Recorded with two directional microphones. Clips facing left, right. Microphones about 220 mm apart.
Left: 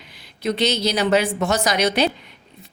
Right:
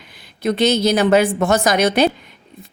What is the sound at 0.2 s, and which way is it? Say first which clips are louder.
A woman's voice: right 4 dB; 50° right (ahead or behind).